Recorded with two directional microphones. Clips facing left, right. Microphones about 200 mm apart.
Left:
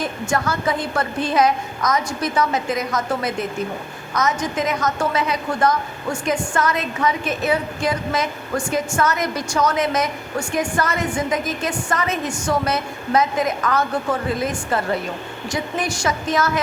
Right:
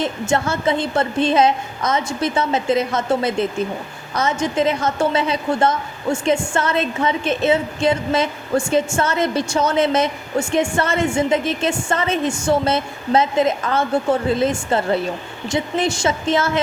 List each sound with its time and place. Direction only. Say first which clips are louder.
0.0 s a woman's voice: right 3 dB; 25° right (ahead or behind)